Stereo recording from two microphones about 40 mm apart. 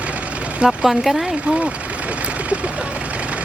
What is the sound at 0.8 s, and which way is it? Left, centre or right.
Speech, centre.